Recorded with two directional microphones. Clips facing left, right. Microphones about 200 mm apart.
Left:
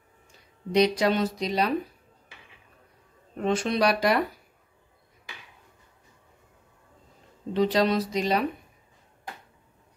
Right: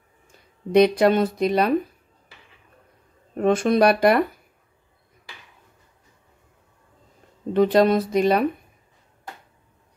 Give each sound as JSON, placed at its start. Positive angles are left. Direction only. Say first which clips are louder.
{"t": 0.7, "sound": "speech", "louder": "right 6 dB", "side_deg": -55}
{"t": 3.3, "sound": "speech", "louder": "right 7 dB", "side_deg": -50}
{"t": 7.5, "sound": "speech", "louder": "right 6 dB", "side_deg": -55}